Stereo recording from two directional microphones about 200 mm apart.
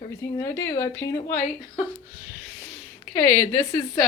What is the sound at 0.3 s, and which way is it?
Speech, 15° left (ahead or behind).